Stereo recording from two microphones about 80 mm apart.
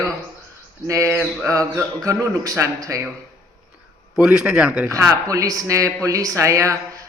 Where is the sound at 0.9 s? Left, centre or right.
Right.